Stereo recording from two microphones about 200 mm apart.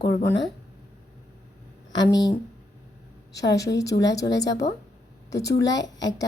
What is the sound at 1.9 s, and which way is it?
A woman's voice, 20° left (ahead or behind).